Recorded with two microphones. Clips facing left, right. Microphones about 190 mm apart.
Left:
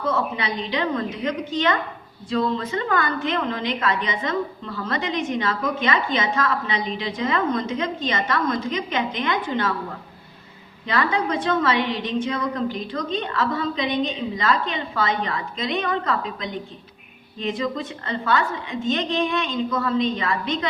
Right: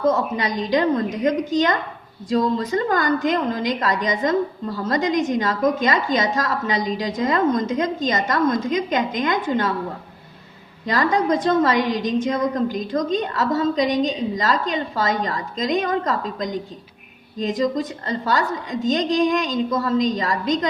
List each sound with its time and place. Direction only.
0.0 s a woman's voice: 40° right (ahead or behind)
10.8 s a woman's voice: 40° right (ahead or behind)